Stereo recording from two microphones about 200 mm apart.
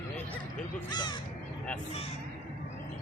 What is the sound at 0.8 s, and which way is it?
Speech, 20° left (ahead or behind).